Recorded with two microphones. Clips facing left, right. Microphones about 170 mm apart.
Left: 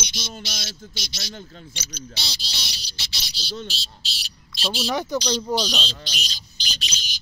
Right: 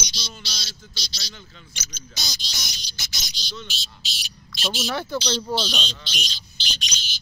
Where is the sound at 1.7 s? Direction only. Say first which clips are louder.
Left 5 dB; 35° left (ahead or behind).